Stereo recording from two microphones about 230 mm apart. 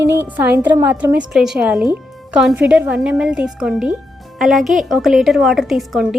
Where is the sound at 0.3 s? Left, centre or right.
Centre.